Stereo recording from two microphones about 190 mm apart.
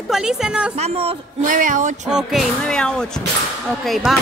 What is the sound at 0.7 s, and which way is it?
Speech, 30° right (ahead or behind).